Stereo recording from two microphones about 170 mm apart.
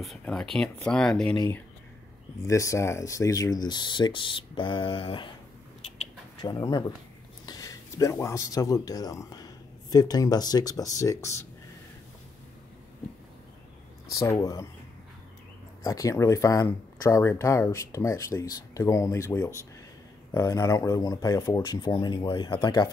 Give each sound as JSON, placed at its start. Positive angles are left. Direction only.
{"t": 0.0, "sound": "speech", "side_deg": 0}
{"t": 2.4, "sound": "speech", "side_deg": 20}
{"t": 5.8, "sound": "a sound", "side_deg": 30}
{"t": 7.4, "sound": "speech", "side_deg": 20}
{"t": 14.1, "sound": "speech", "side_deg": 20}
{"t": 15.8, "sound": "speech", "side_deg": 20}